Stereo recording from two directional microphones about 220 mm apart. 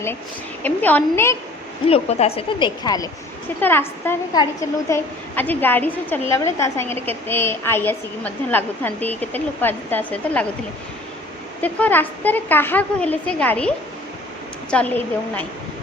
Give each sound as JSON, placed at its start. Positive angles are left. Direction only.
{"t": 0.6, "sound": "a woman's voice", "side_deg": 5}
{"t": 1.9, "sound": "a woman's voice", "side_deg": 30}
{"t": 11.6, "sound": "a woman's voice", "side_deg": 10}